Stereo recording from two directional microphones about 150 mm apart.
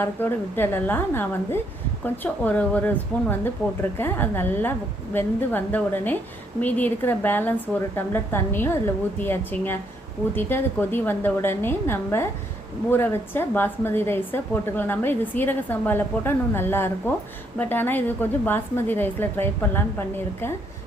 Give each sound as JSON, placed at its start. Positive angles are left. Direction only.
{"t": 0.0, "sound": "a woman's voice", "side_deg": 15}